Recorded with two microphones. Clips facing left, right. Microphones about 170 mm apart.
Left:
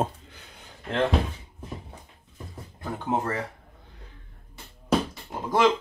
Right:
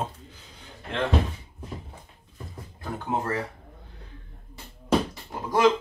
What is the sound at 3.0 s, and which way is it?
Speech, 20° left (ahead or behind).